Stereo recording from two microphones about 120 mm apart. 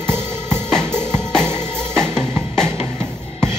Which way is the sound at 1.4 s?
20° right (ahead or behind).